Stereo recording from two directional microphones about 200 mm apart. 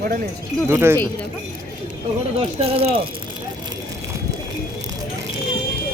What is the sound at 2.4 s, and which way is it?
Speech, 30° right (ahead or behind).